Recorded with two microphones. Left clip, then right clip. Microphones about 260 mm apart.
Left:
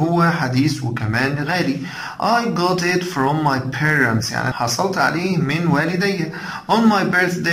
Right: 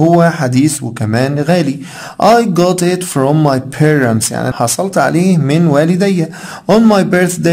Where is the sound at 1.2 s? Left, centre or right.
Right.